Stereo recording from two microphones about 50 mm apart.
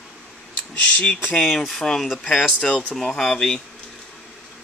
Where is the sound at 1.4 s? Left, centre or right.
Centre.